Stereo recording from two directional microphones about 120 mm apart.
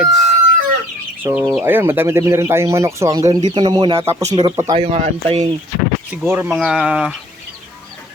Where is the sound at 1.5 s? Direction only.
15° right (ahead or behind); by 4.6 s 35° right (ahead or behind).